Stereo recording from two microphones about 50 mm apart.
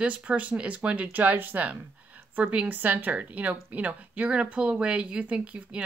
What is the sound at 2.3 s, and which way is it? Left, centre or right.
Speech, right.